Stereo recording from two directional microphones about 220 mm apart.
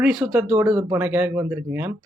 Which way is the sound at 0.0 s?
Centre (ahead or behind).